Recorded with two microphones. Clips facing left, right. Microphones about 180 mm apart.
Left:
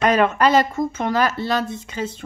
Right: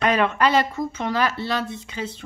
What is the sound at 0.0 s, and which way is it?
Speech, 45° left (ahead or behind).